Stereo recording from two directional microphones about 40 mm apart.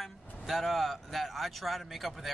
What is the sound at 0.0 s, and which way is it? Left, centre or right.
Speech, centre.